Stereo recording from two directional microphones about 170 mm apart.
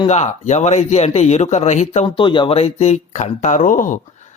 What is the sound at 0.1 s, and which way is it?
Speech, 40° left (ahead or behind).